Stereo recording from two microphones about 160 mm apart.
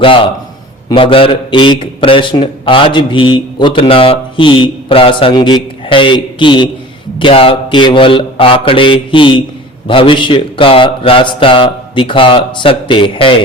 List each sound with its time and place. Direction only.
0.0 s a man's voice: 35° left (ahead or behind)